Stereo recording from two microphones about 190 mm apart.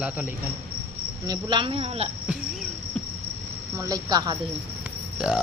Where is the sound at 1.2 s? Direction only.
25° right (ahead or behind).